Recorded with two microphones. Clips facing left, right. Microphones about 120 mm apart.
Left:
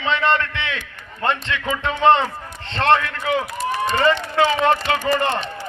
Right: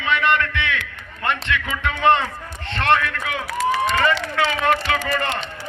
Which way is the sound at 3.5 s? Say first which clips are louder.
Right 3 dB; 90° right.